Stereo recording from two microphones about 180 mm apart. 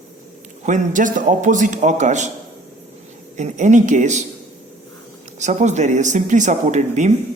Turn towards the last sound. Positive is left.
turn(degrees=-40)  # may be behind; listen again after turning